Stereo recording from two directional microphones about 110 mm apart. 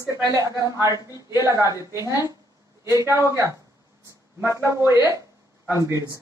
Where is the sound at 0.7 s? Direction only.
30° right (ahead or behind).